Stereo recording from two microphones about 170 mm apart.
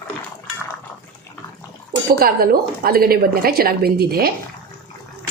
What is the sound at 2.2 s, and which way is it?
A woman's voice, 60° right (ahead or behind).